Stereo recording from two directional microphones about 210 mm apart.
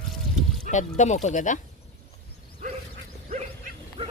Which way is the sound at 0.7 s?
35° left (ahead or behind).